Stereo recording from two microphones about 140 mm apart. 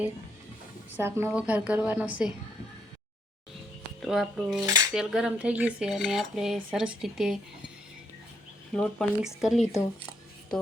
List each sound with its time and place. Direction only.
0.9 s a woman's voice: 15° right (ahead or behind)
4.0 s cutlery: centre (ahead or behind)
8.7 s cutlery: 5° left (ahead or behind)